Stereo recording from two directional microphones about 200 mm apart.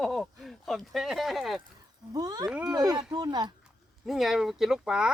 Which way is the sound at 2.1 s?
20° right (ahead or behind).